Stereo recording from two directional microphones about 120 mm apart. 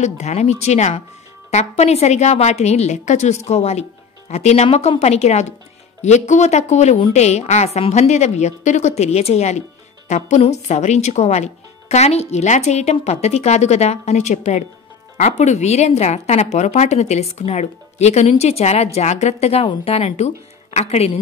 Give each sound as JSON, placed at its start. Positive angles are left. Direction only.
{"t": 0.0, "sound": "speech", "side_deg": 70}
{"t": 3.4, "sound": "a woman's voice", "side_deg": 65}
{"t": 6.0, "sound": "speech", "side_deg": 75}
{"t": 10.0, "sound": "speech", "side_deg": 75}
{"t": 16.5, "sound": "a woman's voice", "side_deg": 80}